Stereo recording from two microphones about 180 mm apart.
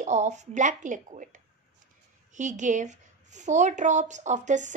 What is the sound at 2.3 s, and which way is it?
A woman's voice, 45° right (ahead or behind).